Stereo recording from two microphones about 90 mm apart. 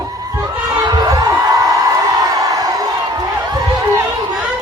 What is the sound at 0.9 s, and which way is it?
Whoop, 40° right (ahead or behind).